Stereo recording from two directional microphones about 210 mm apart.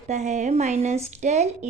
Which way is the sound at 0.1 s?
35° right (ahead or behind).